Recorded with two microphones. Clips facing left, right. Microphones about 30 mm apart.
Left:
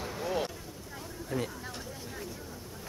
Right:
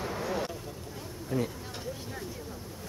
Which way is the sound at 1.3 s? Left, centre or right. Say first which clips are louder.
Right 3 dB; centre.